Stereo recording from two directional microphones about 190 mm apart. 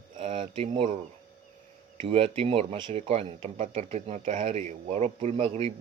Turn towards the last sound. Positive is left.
turn(degrees=-30)  # may be behind; listen again after turning